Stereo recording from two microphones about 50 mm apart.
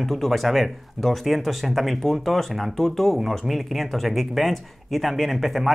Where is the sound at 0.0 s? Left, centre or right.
Centre.